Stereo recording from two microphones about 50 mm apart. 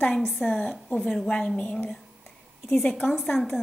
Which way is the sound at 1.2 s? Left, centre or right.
Left.